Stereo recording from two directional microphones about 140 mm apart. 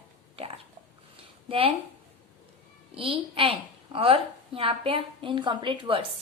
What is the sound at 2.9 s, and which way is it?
A woman's voice, 40° right (ahead or behind).